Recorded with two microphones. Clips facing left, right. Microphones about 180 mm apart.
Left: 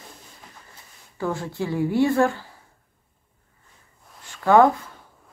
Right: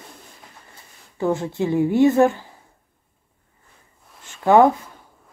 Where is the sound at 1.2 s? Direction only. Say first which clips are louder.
Right 5 dB; 20° right (ahead or behind).